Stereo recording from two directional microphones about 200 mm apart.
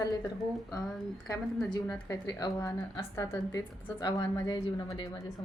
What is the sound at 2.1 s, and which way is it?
A woman's voice, 20° left (ahead or behind).